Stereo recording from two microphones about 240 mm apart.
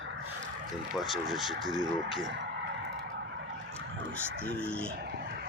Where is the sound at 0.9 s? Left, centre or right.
Centre.